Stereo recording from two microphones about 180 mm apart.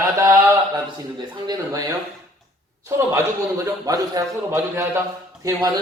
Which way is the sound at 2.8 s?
15° right (ahead or behind).